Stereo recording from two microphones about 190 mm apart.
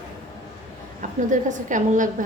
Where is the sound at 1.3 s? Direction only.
40° right (ahead or behind).